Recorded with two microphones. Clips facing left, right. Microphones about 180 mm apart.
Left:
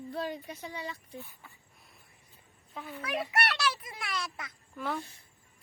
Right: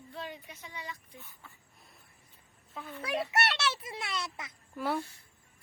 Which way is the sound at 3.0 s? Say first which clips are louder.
Right 1 dB; 25° right (ahead or behind).